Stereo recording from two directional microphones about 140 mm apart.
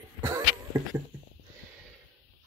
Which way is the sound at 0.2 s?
25° right (ahead or behind).